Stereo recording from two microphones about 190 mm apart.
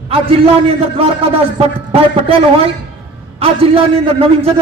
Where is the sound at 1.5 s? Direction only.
30° right (ahead or behind).